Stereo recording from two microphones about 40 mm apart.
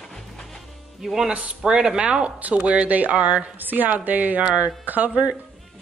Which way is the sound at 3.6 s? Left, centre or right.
Right.